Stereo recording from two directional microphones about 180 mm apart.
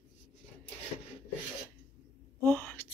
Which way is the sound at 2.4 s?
10° left (ahead or behind).